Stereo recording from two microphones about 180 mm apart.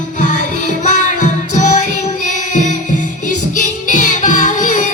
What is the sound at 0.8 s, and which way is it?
Music, 45° left (ahead or behind).